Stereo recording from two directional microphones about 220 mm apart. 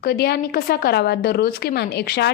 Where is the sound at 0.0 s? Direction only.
45° left (ahead or behind).